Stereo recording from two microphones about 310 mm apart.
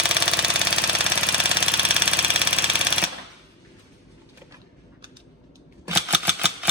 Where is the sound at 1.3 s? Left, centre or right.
Centre.